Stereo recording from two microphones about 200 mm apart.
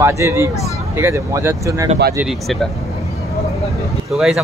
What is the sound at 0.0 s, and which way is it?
Speech, 15° right (ahead or behind).